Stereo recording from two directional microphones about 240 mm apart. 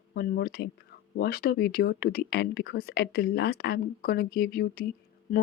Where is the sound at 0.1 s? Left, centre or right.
Left.